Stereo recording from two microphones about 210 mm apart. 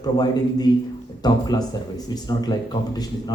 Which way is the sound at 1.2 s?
20° left (ahead or behind).